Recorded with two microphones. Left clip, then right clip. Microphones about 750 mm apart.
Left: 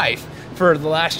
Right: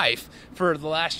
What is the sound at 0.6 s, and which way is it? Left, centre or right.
Speech, right.